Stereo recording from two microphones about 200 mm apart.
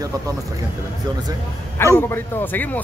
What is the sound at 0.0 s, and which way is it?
Speech, 15° right (ahead or behind).